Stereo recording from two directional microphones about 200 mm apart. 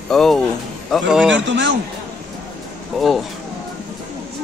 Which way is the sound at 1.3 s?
65° right (ahead or behind).